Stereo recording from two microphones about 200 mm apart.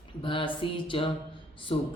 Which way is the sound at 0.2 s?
25° left (ahead or behind).